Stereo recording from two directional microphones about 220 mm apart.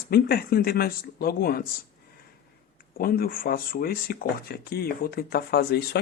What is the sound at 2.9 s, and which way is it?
Speech, 45° left (ahead or behind).